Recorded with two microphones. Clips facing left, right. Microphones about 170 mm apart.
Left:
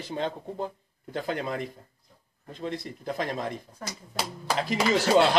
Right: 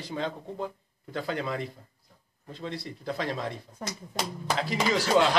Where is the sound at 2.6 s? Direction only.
20° left (ahead or behind).